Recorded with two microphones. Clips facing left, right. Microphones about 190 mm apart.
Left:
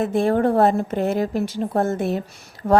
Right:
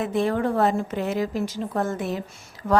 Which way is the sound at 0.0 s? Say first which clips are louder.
Left 4 dB; 50° left (ahead or behind).